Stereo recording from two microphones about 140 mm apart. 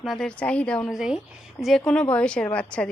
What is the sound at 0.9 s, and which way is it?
A woman's voice, 5° right (ahead or behind).